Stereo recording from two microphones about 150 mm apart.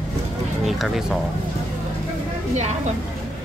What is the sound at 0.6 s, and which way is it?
Speech, centre (ahead or behind).